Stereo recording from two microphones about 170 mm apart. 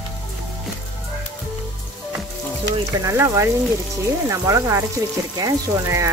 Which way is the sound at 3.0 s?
15° right (ahead or behind).